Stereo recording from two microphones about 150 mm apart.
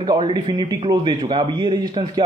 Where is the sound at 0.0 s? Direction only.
30° right (ahead or behind).